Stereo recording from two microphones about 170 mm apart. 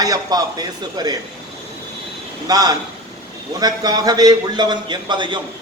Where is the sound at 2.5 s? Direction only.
20° right (ahead or behind).